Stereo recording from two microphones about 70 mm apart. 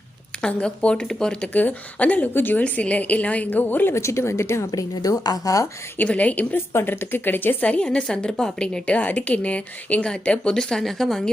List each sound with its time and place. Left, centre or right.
0.4 s speech: centre
1.5 s a woman's voice: left
3.9 s speech: left
4.7 s a woman's voice: left
6.0 s a woman's voice: left; by 11.2 s centre